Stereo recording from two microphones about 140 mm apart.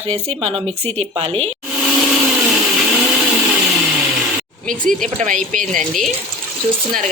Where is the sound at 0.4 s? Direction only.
45° right (ahead or behind).